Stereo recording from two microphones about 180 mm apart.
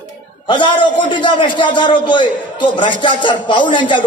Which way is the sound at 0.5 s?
25° left (ahead or behind).